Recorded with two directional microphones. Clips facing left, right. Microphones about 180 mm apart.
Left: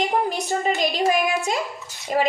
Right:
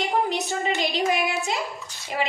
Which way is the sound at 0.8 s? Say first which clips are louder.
Left 3 dB; 50° left (ahead or behind).